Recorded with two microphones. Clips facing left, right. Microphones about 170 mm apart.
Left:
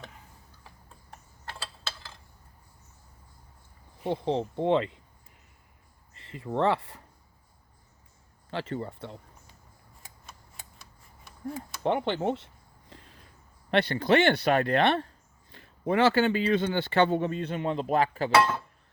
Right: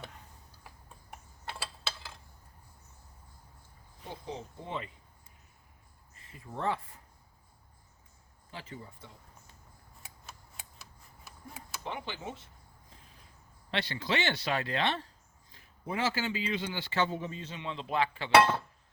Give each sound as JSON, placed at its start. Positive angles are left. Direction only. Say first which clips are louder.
{"t": 0.6, "sound": "mechanisms", "louder": "right 1 dB", "side_deg": -10}
{"t": 4.0, "sound": "speech", "louder": "left 14 dB", "side_deg": 65}
{"t": 6.1, "sound": "speech", "louder": "left 12 dB", "side_deg": 80}
{"t": 8.4, "sound": "speech", "louder": "left 12 dB", "side_deg": 75}
{"t": 10.0, "sound": "a sound", "louder": "even", "side_deg": -5}
{"t": 11.8, "sound": "speech", "louder": "left 13 dB", "side_deg": 60}
{"t": 12.9, "sound": "a sound", "louder": "left 9 dB", "side_deg": 75}
{"t": 13.7, "sound": "speech", "louder": "left 10 dB", "side_deg": 55}
{"t": 15.5, "sound": "speech", "louder": "left 10 dB", "side_deg": 75}
{"t": 18.3, "sound": "speech", "louder": "right 1 dB", "side_deg": -25}